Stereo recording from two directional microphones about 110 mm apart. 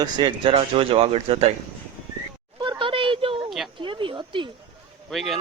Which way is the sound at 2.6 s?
50° right (ahead or behind).